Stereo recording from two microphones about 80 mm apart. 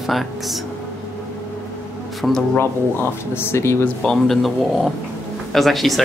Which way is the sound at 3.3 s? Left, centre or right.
Left.